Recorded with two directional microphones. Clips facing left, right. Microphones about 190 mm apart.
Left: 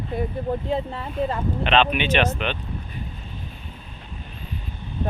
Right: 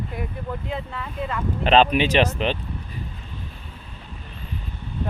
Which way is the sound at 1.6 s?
35° right (ahead or behind).